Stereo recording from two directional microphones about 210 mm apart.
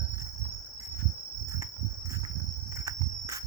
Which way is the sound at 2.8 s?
15° right (ahead or behind).